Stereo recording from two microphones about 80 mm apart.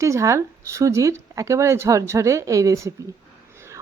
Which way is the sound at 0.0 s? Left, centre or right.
Right.